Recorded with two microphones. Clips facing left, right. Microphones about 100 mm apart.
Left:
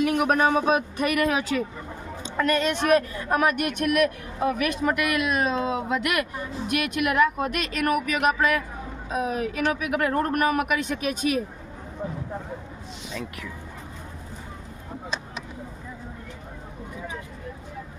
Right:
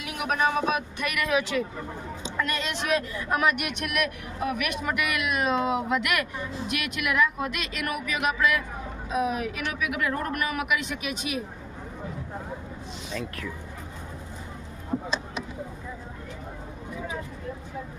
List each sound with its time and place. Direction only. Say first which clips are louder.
0.0 s a woman's voice: left 6 dB; 45° left (ahead or behind)
2.2 s a woman's voice: left 7 dB; 50° left (ahead or behind)